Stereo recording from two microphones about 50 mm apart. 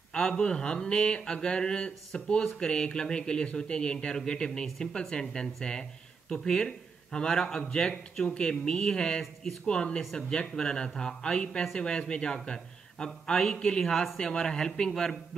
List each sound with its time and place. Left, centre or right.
0.1 s speech: centre